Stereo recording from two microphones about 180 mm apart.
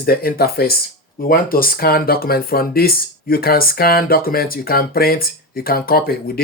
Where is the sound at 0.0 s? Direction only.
60° left (ahead or behind).